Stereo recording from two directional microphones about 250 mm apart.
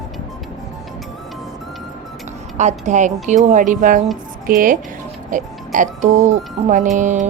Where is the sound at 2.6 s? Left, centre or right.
Right.